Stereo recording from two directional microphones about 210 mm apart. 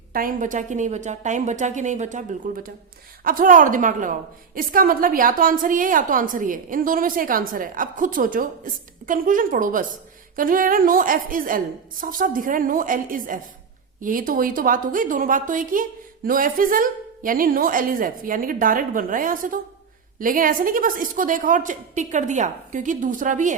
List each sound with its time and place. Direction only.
0.1 s a woman's voice: 40° right (ahead or behind)